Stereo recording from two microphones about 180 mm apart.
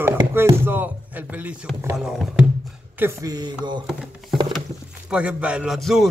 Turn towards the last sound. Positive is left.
turn(degrees=0)  # may be behind; listen again after turning